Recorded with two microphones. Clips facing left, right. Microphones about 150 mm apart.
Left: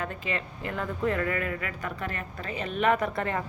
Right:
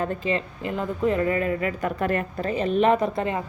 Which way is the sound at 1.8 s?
50° right (ahead or behind).